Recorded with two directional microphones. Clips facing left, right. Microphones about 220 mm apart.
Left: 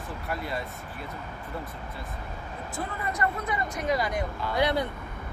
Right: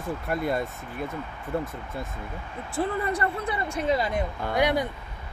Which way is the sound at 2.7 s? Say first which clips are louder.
Right 7 dB; 30° right (ahead or behind).